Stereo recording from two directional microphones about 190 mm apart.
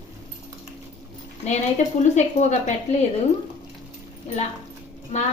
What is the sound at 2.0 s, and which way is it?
Speech, 40° left (ahead or behind).